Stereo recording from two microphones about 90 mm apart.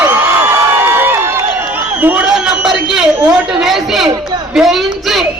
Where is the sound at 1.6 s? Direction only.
20° right (ahead or behind).